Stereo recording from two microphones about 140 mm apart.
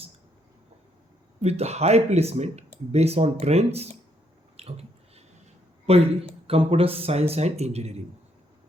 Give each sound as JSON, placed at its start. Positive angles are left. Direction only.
{"t": 1.4, "sound": "speech", "side_deg": -50}
{"t": 4.5, "sound": "a sound", "side_deg": -45}
{"t": 5.8, "sound": "speech", "side_deg": -45}